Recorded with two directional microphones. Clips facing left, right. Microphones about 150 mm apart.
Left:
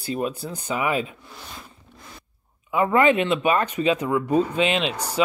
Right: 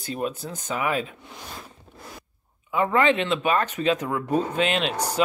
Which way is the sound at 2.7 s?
10° left (ahead or behind).